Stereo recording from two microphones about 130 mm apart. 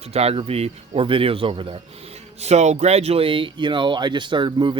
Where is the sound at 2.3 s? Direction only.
55° right (ahead or behind).